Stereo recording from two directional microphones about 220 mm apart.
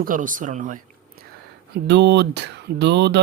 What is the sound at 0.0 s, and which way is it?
Speech, 35° right (ahead or behind).